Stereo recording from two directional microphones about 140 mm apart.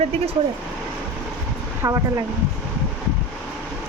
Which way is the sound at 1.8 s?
25° right (ahead or behind).